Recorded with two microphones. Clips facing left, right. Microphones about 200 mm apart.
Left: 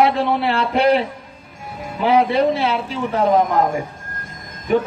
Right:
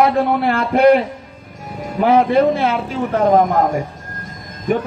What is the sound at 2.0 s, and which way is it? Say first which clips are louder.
A man's voice: right 3 dB; 50° right (ahead or behind).